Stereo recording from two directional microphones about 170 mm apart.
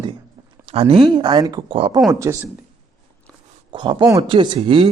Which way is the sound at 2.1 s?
20° right (ahead or behind).